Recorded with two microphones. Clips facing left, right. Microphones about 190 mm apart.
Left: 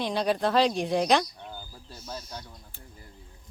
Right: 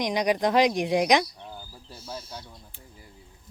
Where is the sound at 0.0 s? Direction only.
15° right (ahead or behind).